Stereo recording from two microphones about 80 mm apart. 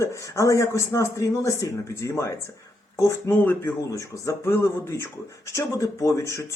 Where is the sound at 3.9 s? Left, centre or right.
Left.